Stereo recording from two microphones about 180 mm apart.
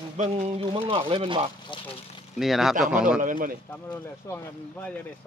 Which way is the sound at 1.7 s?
25° left (ahead or behind).